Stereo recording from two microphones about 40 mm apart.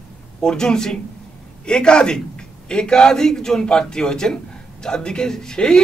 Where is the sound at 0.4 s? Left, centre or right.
Centre.